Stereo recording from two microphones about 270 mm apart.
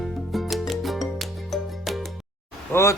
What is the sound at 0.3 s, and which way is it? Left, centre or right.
Music, centre.